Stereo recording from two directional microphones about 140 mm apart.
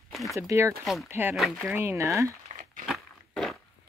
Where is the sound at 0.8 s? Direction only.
Centre (ahead or behind).